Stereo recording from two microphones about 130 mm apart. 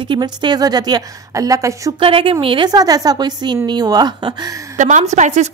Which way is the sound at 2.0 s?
45° right (ahead or behind).